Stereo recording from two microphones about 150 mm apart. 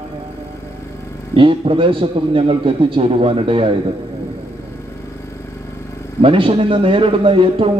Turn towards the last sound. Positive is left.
turn(degrees=-35)  # may be behind; listen again after turning